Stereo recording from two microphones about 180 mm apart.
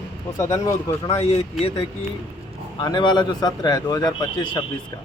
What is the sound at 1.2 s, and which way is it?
Speech, 35° left (ahead or behind).